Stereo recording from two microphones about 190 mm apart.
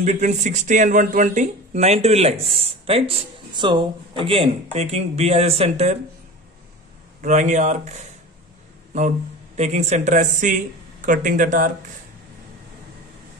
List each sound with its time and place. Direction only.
0.0 s speech: 40° right (ahead or behind)
7.2 s speech: 40° right (ahead or behind)
9.6 s speech: 35° right (ahead or behind)